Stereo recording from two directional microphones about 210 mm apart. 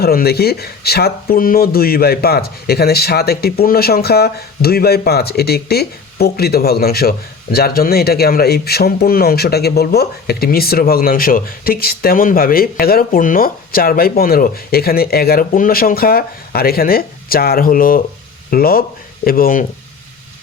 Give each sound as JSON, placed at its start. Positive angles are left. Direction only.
{"t": 0.0, "sound": "speech", "side_deg": 45}